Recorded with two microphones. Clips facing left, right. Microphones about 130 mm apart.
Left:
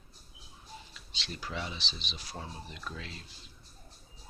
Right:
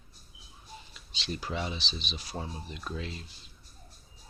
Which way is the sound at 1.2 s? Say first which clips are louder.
Right 4 dB; 20° right (ahead or behind).